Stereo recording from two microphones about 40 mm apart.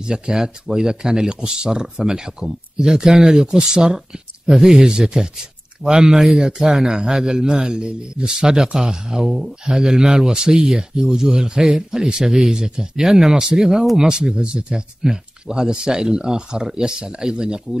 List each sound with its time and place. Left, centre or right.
0.0 s speech: centre